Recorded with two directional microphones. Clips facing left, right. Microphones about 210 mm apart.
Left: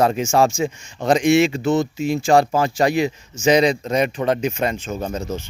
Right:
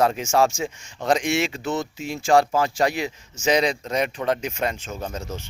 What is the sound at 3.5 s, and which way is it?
Speech, centre (ahead or behind).